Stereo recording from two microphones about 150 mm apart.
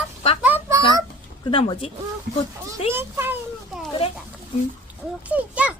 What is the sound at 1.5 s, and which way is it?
Speech, 35° left (ahead or behind).